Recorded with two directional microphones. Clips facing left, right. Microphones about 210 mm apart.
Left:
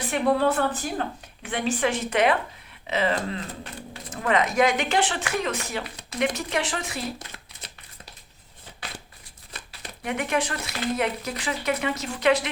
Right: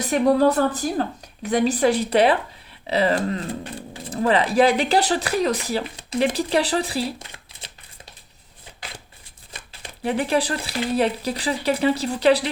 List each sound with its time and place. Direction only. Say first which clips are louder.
0.0 s speech: right 5 dB; 40° right (ahead or behind)
10.0 s speech: right 5 dB; 30° right (ahead or behind)